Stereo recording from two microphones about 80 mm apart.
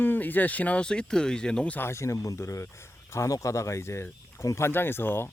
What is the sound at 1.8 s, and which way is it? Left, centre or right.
Speech, left.